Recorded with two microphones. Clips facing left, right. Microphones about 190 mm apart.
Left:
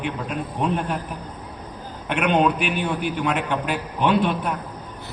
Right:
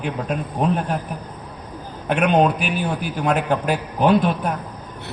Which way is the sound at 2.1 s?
40° right (ahead or behind).